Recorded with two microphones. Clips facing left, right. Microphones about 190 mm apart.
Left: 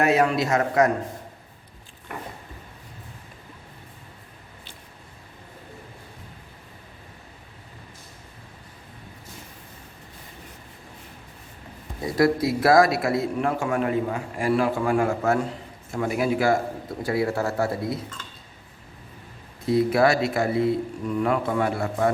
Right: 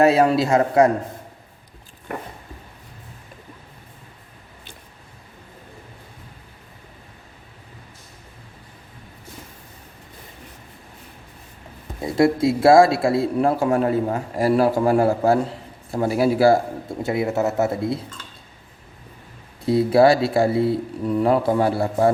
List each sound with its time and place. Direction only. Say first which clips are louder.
0.0 s a man's voice: right 5 dB; 30° right (ahead or behind)
12.0 s a man's voice: right 3 dB; 25° right (ahead or behind)
19.6 s a man's voice: right 5 dB; 30° right (ahead or behind)